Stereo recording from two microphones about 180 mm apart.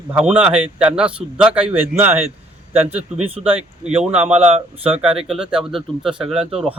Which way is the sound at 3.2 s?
35° right (ahead or behind).